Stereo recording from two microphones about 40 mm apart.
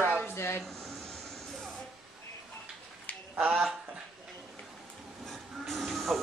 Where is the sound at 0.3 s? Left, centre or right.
Left.